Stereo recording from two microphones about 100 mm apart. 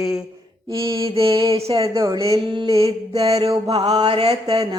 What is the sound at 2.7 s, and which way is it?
Mantra, 80° right.